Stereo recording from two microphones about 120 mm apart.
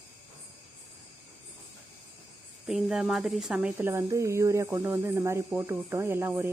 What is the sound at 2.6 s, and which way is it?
Speech, 5° right (ahead or behind).